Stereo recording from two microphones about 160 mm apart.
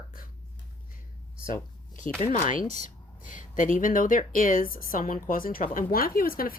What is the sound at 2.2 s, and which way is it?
Speech, 40° left (ahead or behind).